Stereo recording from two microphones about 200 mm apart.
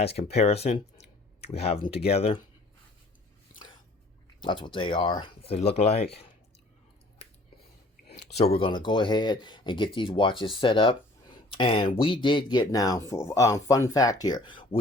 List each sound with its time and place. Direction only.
0.0 s speech: 30° left (ahead or behind)
4.4 s speech: 25° left (ahead or behind)
8.5 s speech: 25° left (ahead or behind)